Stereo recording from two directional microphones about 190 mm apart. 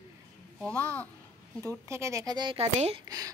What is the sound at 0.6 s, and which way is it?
Speech, 5° left (ahead or behind).